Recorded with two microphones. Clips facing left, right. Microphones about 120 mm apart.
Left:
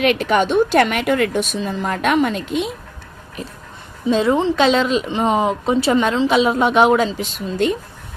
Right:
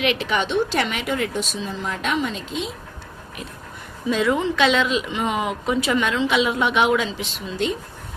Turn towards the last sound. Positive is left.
turn(degrees=50)  # may be behind; listen again after turning